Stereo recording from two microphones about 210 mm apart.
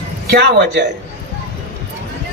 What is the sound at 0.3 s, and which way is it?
Speech, 55° right (ahead or behind).